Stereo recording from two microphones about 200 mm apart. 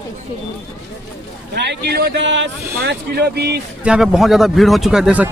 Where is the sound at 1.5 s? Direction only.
55° right (ahead or behind).